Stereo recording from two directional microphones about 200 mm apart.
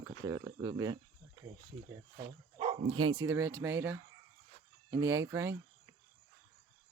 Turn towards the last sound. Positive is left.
turn(degrees=-15)  # may be behind; listen again after turning